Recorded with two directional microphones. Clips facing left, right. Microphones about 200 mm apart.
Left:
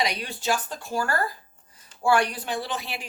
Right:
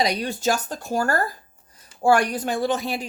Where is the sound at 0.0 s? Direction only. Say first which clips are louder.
Right 6 dB; 40° right (ahead or behind).